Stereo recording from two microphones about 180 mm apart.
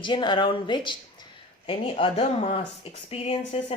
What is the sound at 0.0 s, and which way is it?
Speech, 25° left (ahead or behind).